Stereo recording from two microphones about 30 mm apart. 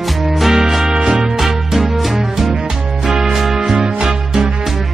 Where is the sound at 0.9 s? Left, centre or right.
Right.